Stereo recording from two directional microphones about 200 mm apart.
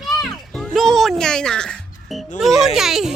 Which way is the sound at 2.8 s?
Centre (ahead or behind).